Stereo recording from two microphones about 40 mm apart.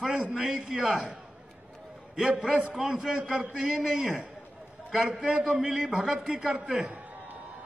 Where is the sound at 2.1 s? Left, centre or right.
Right.